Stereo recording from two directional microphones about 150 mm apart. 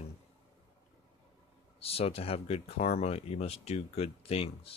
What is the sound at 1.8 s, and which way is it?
Speech, 40° left (ahead or behind).